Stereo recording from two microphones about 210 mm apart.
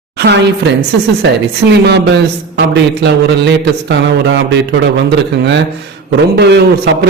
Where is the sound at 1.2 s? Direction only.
55° right (ahead or behind).